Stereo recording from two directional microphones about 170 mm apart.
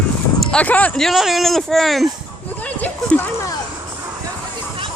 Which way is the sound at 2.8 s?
10° left (ahead or behind).